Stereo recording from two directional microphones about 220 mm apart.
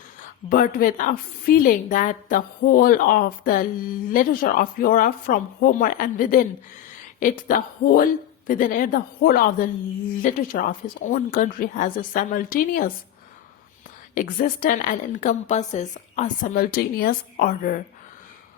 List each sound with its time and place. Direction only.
0.5 s a woman's voice: 40° left (ahead or behind)
14.2 s a woman's voice: 40° left (ahead or behind)